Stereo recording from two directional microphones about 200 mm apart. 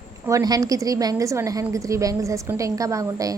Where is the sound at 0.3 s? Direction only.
15° right (ahead or behind).